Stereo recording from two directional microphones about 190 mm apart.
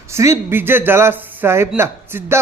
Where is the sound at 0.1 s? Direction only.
15° right (ahead or behind).